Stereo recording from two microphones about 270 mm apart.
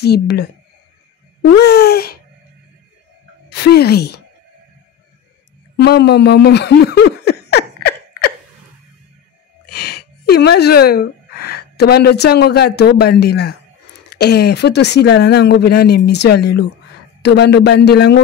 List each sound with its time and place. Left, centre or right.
0.0 s speech: left
1.5 s speech: left
3.4 s speech: left
5.8 s a sound: left
9.7 s speech: left